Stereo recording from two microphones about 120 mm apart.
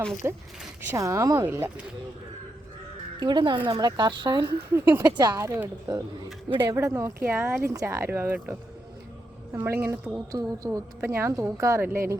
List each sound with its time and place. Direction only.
0.2 s speech: 25° right (ahead or behind)
3.2 s speech: 40° right (ahead or behind)
4.4 s speech: 20° right (ahead or behind)
5.0 s speech: 35° right (ahead or behind)
5.4 s speech: 25° right (ahead or behind)
6.5 s speech: 35° right (ahead or behind)
6.7 s speech: 20° right (ahead or behind)